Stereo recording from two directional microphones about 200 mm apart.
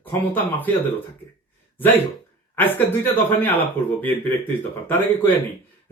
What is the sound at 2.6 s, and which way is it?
Speech, 10° left (ahead or behind).